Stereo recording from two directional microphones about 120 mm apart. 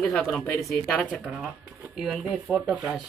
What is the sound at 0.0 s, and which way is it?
Speech, centre (ahead or behind).